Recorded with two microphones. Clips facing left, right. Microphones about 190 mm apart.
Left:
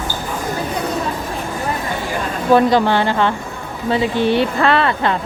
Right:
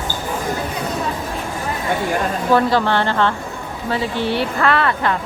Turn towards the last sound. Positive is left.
turn(degrees=25)  # may be behind; listen again after turning